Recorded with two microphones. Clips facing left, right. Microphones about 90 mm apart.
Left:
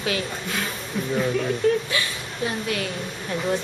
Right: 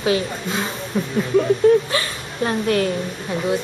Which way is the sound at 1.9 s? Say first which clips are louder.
Right 3 dB; 45° right (ahead or behind).